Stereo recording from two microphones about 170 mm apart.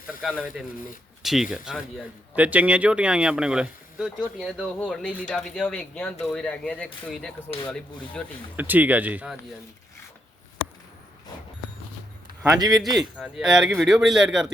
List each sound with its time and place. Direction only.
0.2 s speech: 5° right (ahead or behind)
8.5 s speech: 10° right (ahead or behind)
12.4 s a man's voice: 20° right (ahead or behind)
13.0 s speech: 5° right (ahead or behind)